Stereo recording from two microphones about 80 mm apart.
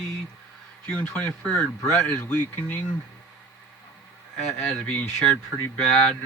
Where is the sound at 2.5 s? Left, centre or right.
Left.